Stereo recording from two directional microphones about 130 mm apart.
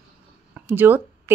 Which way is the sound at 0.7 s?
15° right (ahead or behind).